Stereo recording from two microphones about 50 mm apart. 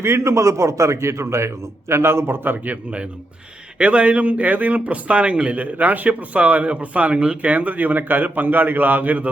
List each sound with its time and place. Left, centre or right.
0.0 s a man's voice: right
3.8 s speech: right